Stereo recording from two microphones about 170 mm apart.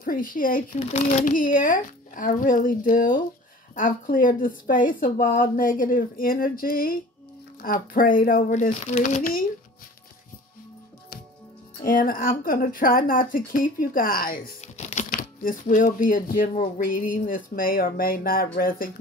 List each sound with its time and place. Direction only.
0.0 s a woman's voice: 55° left (ahead or behind)
11.8 s a woman's voice: 55° left (ahead or behind)